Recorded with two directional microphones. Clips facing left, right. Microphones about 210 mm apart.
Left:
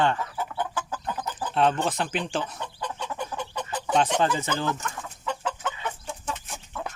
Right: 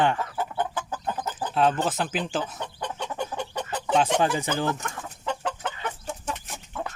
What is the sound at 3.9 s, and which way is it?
Speech, 15° right (ahead or behind).